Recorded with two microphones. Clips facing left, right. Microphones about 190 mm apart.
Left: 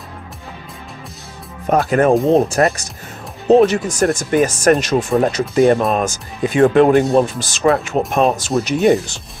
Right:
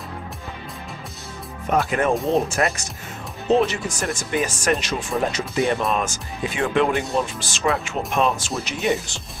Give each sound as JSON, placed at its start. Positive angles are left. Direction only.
{"t": 1.7, "sound": "speech", "side_deg": 45}
{"t": 2.1, "sound": "speech", "side_deg": 0}
{"t": 2.4, "sound": "speech", "side_deg": 35}